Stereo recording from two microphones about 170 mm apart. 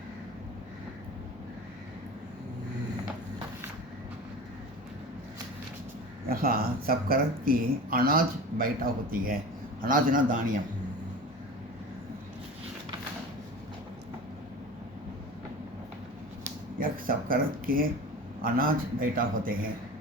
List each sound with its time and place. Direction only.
6.2 s a man's voice: 60° right (ahead or behind)
16.7 s speech: 55° right (ahead or behind)